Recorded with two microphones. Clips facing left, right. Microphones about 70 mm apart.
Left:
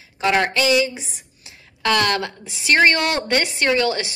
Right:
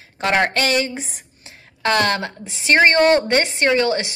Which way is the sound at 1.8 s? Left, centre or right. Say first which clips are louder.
Right 1 dB; right.